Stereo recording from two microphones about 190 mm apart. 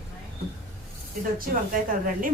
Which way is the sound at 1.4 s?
45° right (ahead or behind).